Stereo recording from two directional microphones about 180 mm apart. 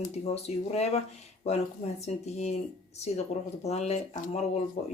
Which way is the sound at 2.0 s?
40° left (ahead or behind).